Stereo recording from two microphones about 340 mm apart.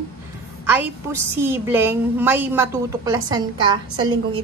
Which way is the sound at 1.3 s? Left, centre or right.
Centre.